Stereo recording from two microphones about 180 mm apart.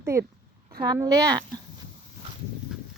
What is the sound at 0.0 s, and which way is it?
A woman's voice, 15° right (ahead or behind).